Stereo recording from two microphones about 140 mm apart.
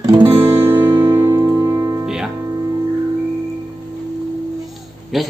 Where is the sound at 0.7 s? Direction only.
15° right (ahead or behind).